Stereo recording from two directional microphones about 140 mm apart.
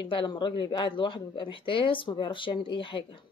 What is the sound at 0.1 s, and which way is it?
Speech, 35° left (ahead or behind).